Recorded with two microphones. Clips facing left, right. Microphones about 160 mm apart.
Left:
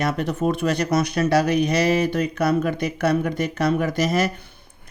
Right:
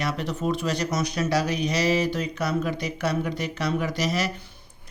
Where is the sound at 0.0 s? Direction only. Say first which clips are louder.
Left 5 dB; 50° left (ahead or behind).